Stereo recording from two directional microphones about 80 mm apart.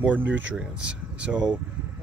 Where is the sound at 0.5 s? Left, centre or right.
Centre.